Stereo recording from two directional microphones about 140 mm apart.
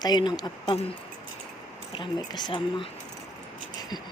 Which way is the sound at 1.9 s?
30° left (ahead or behind).